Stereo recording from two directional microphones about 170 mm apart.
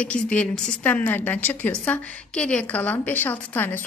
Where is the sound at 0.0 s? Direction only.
10° left (ahead or behind).